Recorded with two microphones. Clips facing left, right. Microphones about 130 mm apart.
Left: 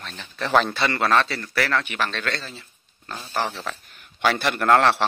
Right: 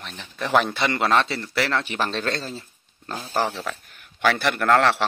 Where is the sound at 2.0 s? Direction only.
35° right (ahead or behind).